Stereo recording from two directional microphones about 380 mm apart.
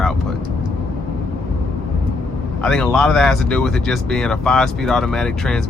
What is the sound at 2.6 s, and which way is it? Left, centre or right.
Speech, centre.